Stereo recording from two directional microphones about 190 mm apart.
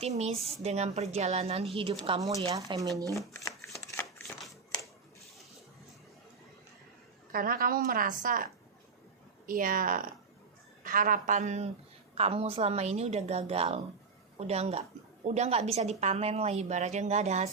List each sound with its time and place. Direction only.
0.0 s a woman's voice: 30° right (ahead or behind)
2.5 s speech: 20° right (ahead or behind)
3.6 s shuffling cards: 15° left (ahead or behind)
7.3 s a woman's voice: 50° right (ahead or behind)
9.5 s a woman's voice: 45° right (ahead or behind)